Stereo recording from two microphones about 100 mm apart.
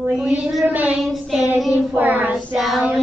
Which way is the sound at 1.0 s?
Centre (ahead or behind).